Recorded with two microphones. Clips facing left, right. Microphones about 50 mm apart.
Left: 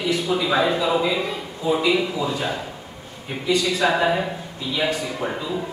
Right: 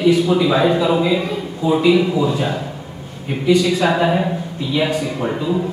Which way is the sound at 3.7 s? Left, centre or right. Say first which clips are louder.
Right 3 dB; centre.